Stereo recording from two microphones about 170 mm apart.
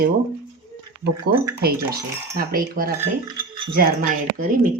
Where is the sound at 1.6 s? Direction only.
65° right (ahead or behind).